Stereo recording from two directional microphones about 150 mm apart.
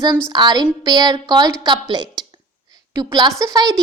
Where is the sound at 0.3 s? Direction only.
30° right (ahead or behind).